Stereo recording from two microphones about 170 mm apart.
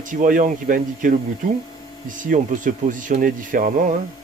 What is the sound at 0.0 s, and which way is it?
Speech, 50° right (ahead or behind).